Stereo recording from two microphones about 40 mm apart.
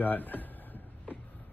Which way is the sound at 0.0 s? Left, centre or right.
Left.